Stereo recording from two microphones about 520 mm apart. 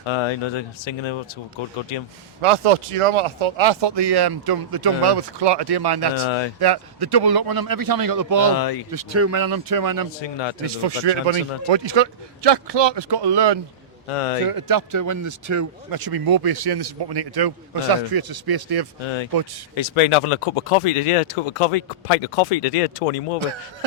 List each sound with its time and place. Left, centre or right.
0.1 s speech: left
2.4 s speech: right
6.1 s speech: left
6.6 s a man's voice: right
9.4 s a man's voice: right
10.2 s speech: left
10.7 s speech: right
14.1 s speech: left
14.4 s speech: right
19.0 s speech: left